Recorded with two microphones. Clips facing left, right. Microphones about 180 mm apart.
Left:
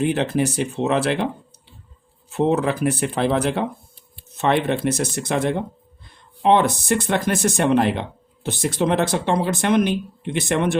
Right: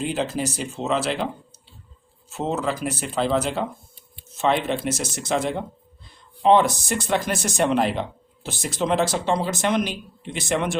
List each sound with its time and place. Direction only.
0.0 s speech: 65° left (ahead or behind)
2.3 s speech: 60° left (ahead or behind)